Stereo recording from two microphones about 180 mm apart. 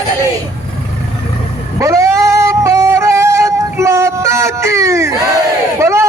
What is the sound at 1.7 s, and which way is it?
Music, 15° right (ahead or behind).